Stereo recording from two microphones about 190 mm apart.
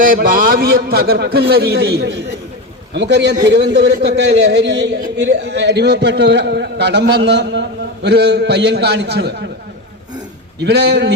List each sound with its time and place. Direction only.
0.0 s a man's voice: 45° right (ahead or behind); by 9.5 s 60° right (ahead or behind)
10.6 s a man's voice: 60° right (ahead or behind)